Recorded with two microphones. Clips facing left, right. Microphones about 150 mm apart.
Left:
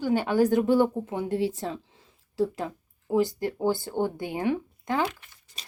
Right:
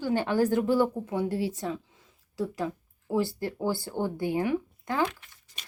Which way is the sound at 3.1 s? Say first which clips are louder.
Left 3 dB; 15° left (ahead or behind).